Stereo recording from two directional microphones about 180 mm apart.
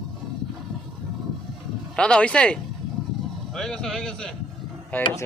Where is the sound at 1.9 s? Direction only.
5° left (ahead or behind).